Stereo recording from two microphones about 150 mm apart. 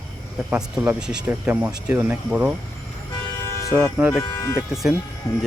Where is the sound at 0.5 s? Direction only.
10° right (ahead or behind).